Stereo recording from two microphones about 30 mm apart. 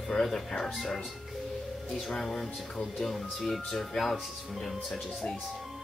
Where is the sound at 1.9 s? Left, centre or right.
Centre.